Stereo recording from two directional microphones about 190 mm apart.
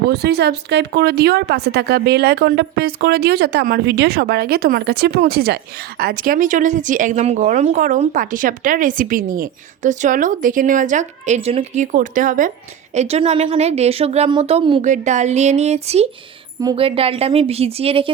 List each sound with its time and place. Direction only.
0.1 s a woman's voice: 60° right (ahead or behind); by 14.8 s 30° right (ahead or behind)
14.8 s a woman's voice: 40° right (ahead or behind)